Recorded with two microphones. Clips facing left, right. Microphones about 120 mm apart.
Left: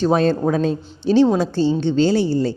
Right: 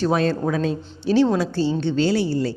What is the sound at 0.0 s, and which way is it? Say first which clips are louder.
Speech: left 4 dB; 30° left (ahead or behind).